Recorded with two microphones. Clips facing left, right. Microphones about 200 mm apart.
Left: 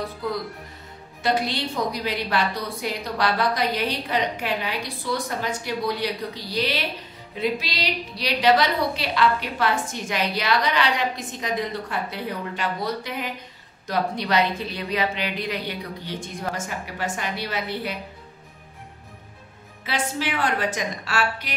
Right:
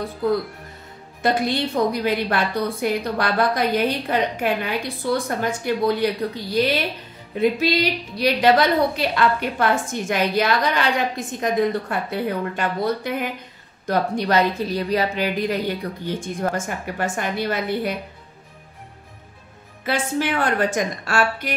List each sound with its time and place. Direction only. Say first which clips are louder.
1.2 s a woman's voice: right 3 dB; 50° right (ahead or behind)
19.8 s a woman's voice: right 5 dB; 50° right (ahead or behind)